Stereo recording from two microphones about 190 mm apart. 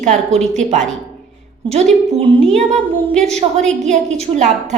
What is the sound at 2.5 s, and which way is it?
A woman's voice, 35° right (ahead or behind).